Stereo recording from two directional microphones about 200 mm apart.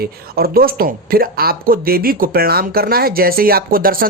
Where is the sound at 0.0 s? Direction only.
50° right (ahead or behind).